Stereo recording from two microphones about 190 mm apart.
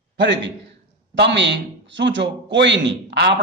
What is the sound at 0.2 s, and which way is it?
A man's voice, 70° right (ahead or behind).